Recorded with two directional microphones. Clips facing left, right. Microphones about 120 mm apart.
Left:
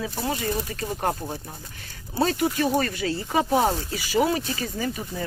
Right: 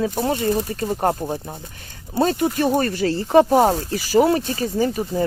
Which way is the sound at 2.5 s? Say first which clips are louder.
Right 4 dB; 50° right (ahead or behind).